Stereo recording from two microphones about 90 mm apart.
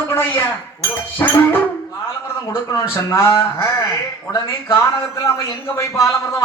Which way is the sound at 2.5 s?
30° left (ahead or behind).